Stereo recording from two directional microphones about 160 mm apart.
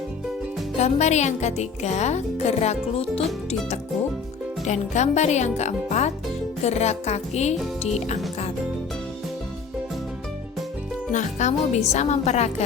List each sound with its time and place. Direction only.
0.8 s speech: 45° left (ahead or behind)
4.6 s speech: 45° left (ahead or behind)
11.1 s speech: 50° left (ahead or behind)